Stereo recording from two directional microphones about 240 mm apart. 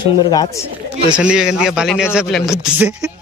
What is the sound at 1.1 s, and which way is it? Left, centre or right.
A man's voice, centre.